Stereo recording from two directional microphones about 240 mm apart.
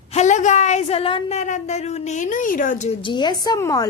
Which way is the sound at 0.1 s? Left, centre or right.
Left.